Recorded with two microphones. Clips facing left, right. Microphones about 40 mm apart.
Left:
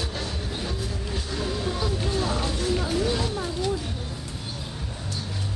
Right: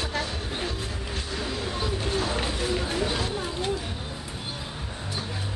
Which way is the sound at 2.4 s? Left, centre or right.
Centre.